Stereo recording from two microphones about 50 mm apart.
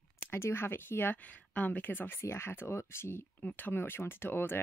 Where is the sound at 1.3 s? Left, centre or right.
Left.